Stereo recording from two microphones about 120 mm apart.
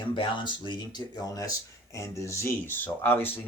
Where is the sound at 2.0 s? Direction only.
25° left (ahead or behind).